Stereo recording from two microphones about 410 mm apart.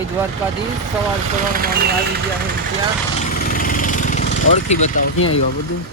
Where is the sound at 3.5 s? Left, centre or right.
Centre.